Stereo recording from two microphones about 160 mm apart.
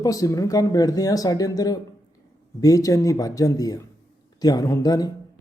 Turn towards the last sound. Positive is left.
turn(degrees=25)  # may be behind; listen again after turning